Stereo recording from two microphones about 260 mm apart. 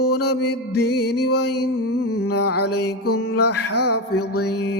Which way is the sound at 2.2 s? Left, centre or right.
Left.